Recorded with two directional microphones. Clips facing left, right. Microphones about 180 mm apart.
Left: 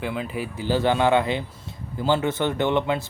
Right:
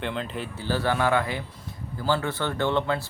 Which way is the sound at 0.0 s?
5° left (ahead or behind).